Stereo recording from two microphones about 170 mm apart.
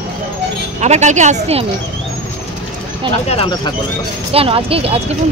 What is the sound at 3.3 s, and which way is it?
Speech, 30° left (ahead or behind).